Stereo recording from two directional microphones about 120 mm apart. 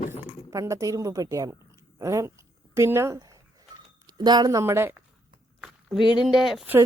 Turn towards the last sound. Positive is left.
turn(degrees=0)  # may be behind; listen again after turning